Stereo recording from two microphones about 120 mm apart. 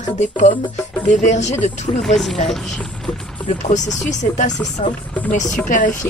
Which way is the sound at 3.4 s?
85° left.